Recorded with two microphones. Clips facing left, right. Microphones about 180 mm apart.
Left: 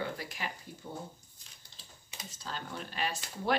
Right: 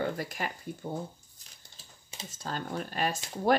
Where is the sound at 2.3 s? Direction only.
50° right (ahead or behind).